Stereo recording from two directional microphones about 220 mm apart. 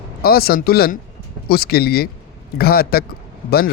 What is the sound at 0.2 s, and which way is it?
Speech, 45° left (ahead or behind).